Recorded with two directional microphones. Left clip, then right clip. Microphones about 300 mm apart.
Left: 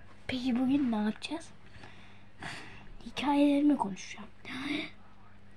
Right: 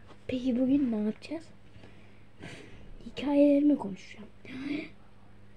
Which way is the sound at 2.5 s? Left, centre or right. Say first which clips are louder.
Left 5 dB; centre.